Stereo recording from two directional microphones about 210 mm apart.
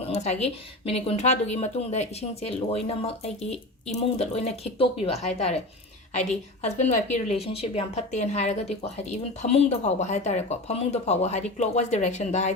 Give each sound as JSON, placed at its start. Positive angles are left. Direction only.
{"t": 0.1, "sound": "speech", "side_deg": 30}